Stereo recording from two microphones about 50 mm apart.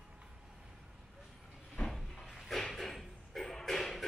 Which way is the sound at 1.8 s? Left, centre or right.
Centre.